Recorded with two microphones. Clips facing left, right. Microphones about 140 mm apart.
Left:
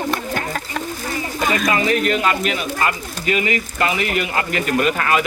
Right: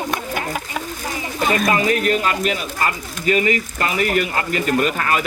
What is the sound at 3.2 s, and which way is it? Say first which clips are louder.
Speech: right 2 dB; 40° right (ahead or behind).